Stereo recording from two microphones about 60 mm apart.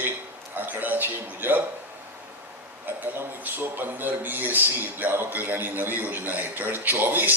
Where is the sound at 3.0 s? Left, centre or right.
Right.